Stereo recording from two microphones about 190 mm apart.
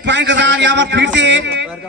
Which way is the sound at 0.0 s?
70° right (ahead or behind).